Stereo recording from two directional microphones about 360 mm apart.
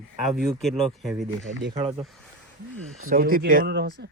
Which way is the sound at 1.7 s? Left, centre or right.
Centre.